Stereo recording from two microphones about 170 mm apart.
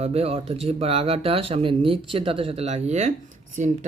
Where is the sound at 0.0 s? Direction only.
35° right (ahead or behind).